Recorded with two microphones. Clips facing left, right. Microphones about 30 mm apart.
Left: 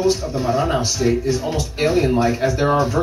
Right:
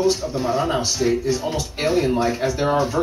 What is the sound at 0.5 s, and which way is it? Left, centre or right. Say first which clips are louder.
Speech: left 2 dB; centre.